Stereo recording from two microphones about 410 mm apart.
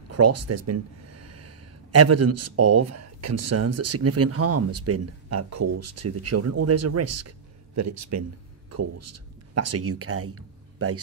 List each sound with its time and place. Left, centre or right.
0.1 s speech: right